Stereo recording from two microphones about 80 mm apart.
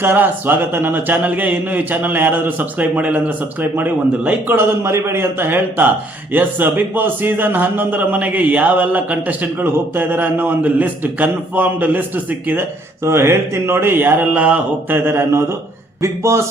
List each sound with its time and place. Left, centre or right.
0.0 s a man's voice: right
4.5 s a man's voice: right
13.0 s a man's voice: right; by 14.9 s centre
14.9 s mantra: right